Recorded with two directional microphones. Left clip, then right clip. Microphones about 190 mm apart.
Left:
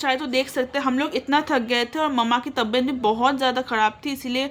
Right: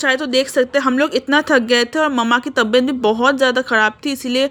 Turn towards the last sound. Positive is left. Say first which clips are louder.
# right 8 dB
turn(degrees=-30)  # may be behind; listen again after turning